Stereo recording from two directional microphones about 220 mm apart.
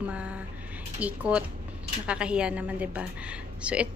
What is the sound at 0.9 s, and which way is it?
A woman's voice, 5° right (ahead or behind).